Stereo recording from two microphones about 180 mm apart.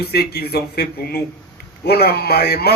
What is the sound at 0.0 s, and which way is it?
A man's voice, 60° left (ahead or behind).